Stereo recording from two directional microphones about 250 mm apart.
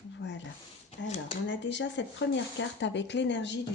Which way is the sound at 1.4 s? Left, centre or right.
Left.